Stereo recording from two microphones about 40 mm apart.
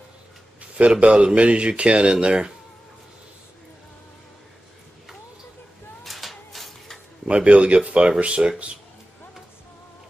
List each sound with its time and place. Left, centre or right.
0.6 s speech: right
6.0 s a sound: centre
7.2 s speech: right